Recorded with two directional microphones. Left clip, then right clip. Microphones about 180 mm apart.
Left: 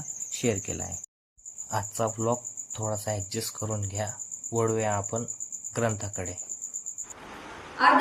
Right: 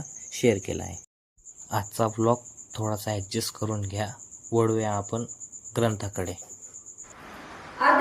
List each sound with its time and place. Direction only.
0.3 s speech: 10° right (ahead or behind)
1.7 s speech: 20° right (ahead or behind)